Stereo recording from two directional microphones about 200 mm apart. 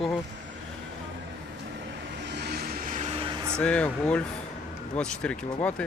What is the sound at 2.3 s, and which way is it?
Vehicle, 55° right (ahead or behind).